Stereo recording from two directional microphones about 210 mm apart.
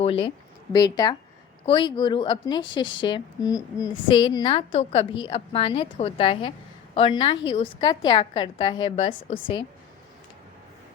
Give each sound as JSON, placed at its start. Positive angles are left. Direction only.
{"t": 0.0, "sound": "a woman's voice", "side_deg": 25}